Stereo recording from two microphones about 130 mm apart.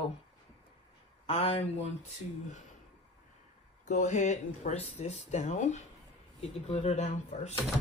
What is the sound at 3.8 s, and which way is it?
Speech, 65° left (ahead or behind).